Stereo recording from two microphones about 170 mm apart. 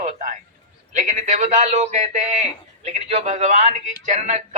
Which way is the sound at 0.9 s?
45° right (ahead or behind).